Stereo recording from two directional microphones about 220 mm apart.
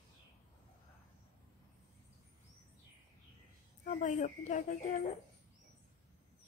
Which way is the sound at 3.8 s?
35° left (ahead or behind).